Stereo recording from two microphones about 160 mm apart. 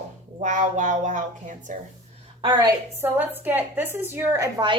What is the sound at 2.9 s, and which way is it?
A woman's voice, 15° right (ahead or behind).